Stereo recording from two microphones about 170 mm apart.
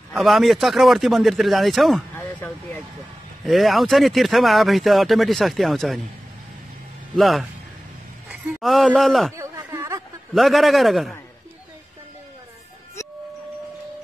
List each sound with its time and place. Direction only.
0.1 s speech: centre (ahead or behind)
2.1 s a sound: 15° left (ahead or behind)
3.4 s speech: centre (ahead or behind)
7.2 s speech: centre (ahead or behind)
9.4 s a sound: 15° right (ahead or behind)
10.3 s speech: centre (ahead or behind)